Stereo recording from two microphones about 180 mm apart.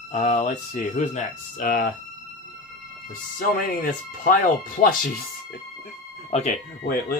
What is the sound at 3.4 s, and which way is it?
Speech, 50° left (ahead or behind).